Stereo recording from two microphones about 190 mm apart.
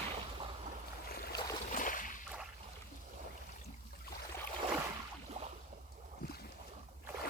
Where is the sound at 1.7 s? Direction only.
45° left (ahead or behind).